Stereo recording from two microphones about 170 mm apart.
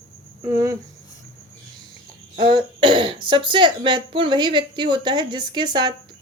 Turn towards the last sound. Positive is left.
turn(degrees=-25)  # may be behind; listen again after turning